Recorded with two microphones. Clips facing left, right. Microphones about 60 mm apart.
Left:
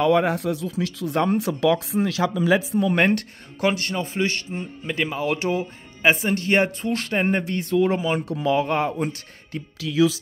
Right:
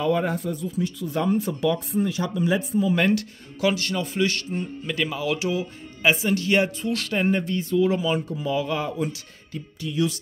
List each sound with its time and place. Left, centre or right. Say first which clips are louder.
0.0 s speech: left 4 dB; left
2.9 s speech: left 2 dB; left
8.3 s speech: left 5 dB; left
8.5 s speech: left 3 dB; left